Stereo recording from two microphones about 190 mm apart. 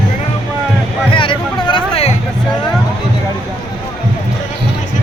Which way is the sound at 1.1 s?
25° left (ahead or behind).